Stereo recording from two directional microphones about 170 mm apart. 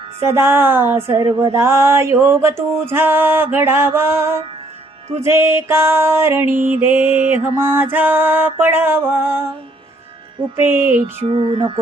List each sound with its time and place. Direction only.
0.2 s music: 15° right (ahead or behind)
10.6 s music: 15° right (ahead or behind)
11.3 s a sound: 30° right (ahead or behind)